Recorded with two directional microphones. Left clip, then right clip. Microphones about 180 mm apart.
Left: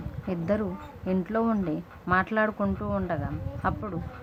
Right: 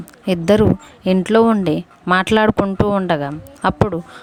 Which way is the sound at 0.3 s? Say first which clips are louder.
Right 15 dB; 55° right (ahead or behind).